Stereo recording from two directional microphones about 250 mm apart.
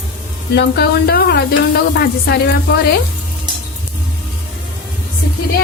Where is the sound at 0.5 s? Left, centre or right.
Left.